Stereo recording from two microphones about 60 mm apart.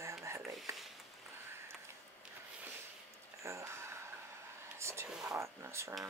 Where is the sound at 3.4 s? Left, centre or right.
Right.